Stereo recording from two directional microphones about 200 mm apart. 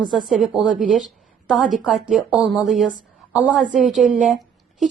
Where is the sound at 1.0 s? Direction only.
Centre (ahead or behind).